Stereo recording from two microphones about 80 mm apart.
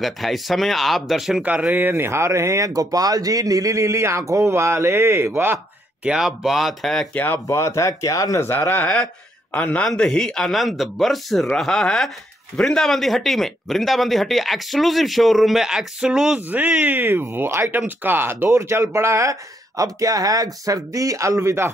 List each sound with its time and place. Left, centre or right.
0.0 s speech: centre
1.4 s speech: centre
6.0 s speech: centre
7.4 s speech: left
8.4 s a man's voice: left; by 16.3 s centre
16.3 s speech: right
19.8 s speech: right